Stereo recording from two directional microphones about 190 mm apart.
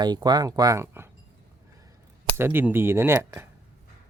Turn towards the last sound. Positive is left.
turn(degrees=-10)  # may be behind; listen again after turning